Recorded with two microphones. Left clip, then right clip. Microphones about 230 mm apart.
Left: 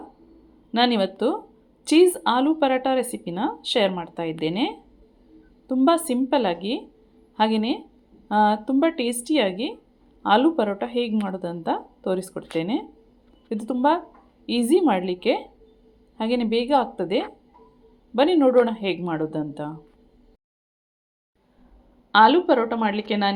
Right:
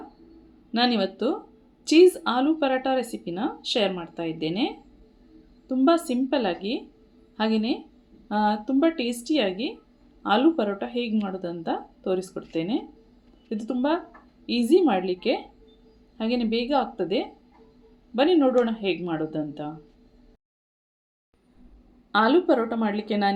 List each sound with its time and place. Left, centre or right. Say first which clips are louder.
0.7 s speech: left 3 dB; centre
22.1 s a woman's voice: left 5 dB; centre